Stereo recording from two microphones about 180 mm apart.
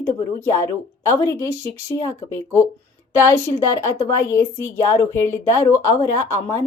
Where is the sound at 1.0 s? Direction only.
15° left (ahead or behind).